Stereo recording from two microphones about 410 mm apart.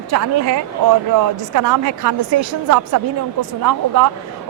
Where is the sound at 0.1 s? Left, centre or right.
Right.